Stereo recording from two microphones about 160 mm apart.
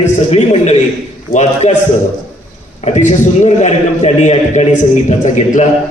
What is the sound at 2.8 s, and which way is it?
A man's voice, 50° left (ahead or behind).